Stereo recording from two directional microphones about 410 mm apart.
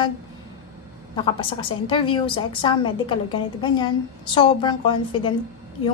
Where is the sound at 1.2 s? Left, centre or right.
Centre.